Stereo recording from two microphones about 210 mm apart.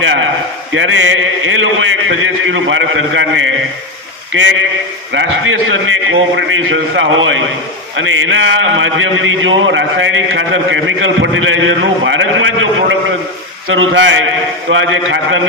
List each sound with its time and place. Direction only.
0.7 s a man's voice: 65° right (ahead or behind)